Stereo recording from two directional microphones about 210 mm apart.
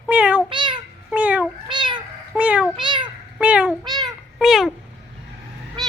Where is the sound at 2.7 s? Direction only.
20° right (ahead or behind).